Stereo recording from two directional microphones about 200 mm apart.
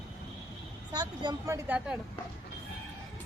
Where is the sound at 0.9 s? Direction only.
20° right (ahead or behind).